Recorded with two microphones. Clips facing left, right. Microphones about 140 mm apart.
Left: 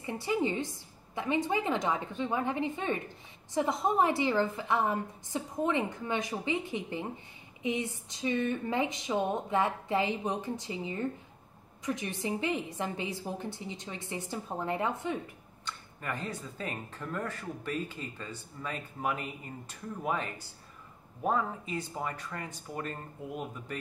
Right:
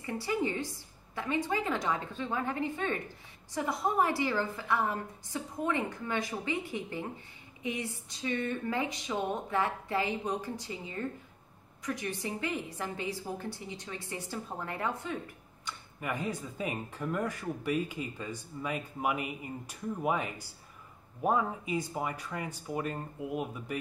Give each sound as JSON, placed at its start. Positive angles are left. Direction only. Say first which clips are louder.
{"t": 0.0, "sound": "a woman's voice", "louder": "left 1 dB", "side_deg": 20}
{"t": 15.6, "sound": "speech", "louder": "right 1 dB", "side_deg": -10}